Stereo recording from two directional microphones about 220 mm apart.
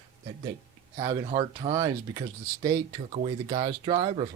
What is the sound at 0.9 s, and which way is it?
Speech, 15° right (ahead or behind).